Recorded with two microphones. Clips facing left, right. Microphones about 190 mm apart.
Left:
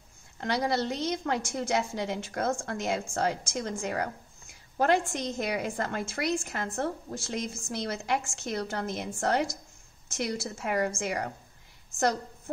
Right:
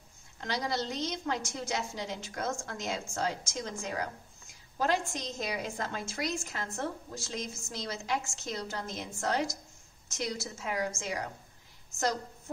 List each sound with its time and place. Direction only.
0.4 s a woman's voice: 60° left (ahead or behind)